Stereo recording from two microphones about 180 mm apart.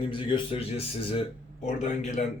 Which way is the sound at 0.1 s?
25° left (ahead or behind).